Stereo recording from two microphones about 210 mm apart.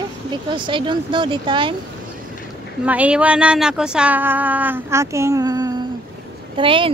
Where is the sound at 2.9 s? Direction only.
5° right (ahead or behind); by 6.8 s 25° right (ahead or behind).